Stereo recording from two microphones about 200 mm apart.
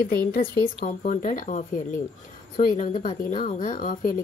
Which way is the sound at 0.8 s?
40° left (ahead or behind).